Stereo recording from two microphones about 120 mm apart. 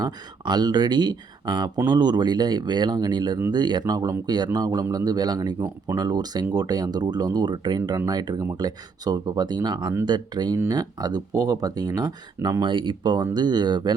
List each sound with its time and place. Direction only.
0.0 s speech: 35° right (ahead or behind)